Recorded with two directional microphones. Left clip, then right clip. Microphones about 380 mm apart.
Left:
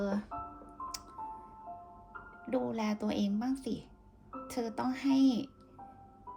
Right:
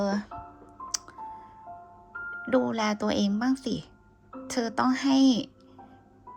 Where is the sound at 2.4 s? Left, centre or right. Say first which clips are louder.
Right 9 dB; right.